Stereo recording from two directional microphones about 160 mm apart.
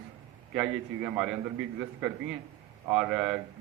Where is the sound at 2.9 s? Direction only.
5° right (ahead or behind).